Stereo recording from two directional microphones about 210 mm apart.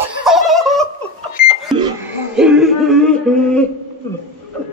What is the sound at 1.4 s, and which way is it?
Microwave oven, 45° left (ahead or behind).